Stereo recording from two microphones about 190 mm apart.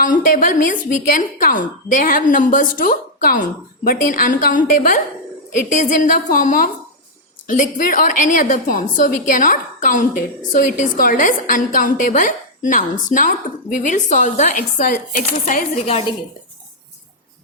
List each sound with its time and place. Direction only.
0.0 s a woman's voice: 45° left (ahead or behind)